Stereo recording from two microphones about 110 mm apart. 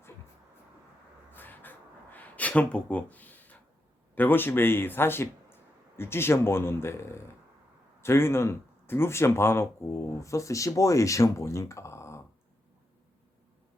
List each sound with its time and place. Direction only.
1.3 s crow: 15° left (ahead or behind)
4.1 s speech: 15° left (ahead or behind)